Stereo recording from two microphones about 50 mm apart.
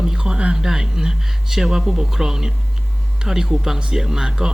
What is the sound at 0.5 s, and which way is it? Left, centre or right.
Speech, centre.